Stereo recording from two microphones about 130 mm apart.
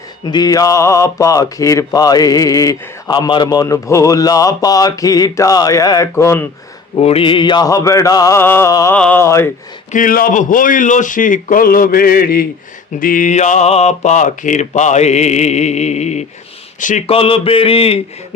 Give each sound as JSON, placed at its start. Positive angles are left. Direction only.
{"t": 0.3, "sound": "speech", "side_deg": 30}
{"t": 7.0, "sound": "speech", "side_deg": 50}
{"t": 9.0, "sound": "speech", "side_deg": 10}
{"t": 9.2, "sound": "speech", "side_deg": 20}
{"t": 9.9, "sound": "a man's voice", "side_deg": 90}
{"t": 13.0, "sound": "mantra", "side_deg": 90}
{"t": 17.1, "sound": "mantra", "side_deg": 45}